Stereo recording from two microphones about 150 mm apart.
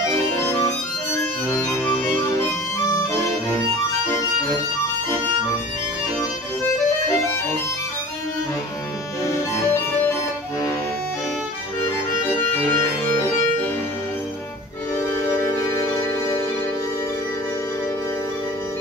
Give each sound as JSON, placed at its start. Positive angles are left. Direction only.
{"t": 0.0, "sound": "music", "side_deg": 20}
{"t": 2.9, "sound": "music", "side_deg": 20}
{"t": 9.2, "sound": "music", "side_deg": 20}